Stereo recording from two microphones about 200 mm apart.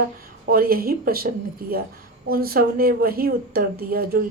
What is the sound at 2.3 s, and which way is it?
Speech, 50° right (ahead or behind).